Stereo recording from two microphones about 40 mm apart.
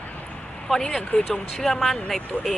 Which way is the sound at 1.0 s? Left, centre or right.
Centre.